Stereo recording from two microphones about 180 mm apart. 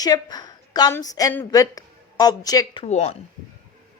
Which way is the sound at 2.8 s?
35° left (ahead or behind).